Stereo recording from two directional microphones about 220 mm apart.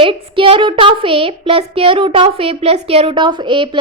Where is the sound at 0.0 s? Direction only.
25° right (ahead or behind).